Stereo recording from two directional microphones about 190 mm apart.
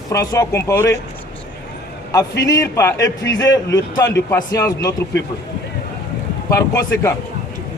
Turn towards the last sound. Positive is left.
turn(degrees=15)  # may be behind; listen again after turning